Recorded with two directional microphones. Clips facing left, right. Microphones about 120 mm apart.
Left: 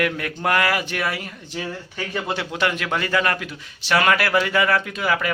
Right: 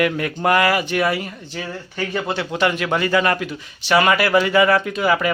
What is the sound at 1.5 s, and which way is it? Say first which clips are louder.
A man's voice: right 2 dB; 10° left (ahead or behind).